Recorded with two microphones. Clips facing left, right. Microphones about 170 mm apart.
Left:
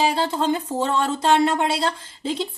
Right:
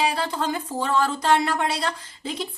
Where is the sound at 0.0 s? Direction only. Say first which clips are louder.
Left 3 dB; 25° left (ahead or behind).